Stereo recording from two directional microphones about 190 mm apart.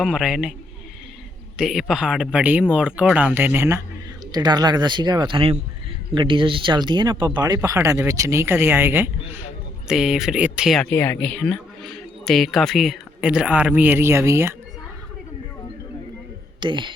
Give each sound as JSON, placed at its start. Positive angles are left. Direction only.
{"t": 0.0, "sound": "speech", "side_deg": 0}
{"t": 1.5, "sound": "speech", "side_deg": 0}
{"t": 16.6, "sound": "speech", "side_deg": -25}